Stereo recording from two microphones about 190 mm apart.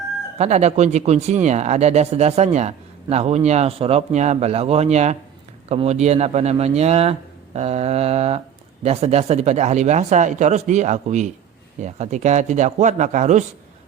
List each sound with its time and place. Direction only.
0.3 s speech: 35° right (ahead or behind)